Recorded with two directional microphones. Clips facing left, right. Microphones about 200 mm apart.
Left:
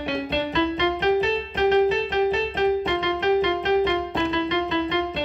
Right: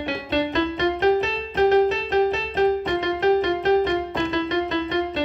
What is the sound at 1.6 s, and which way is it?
Keyboard, 40° right (ahead or behind).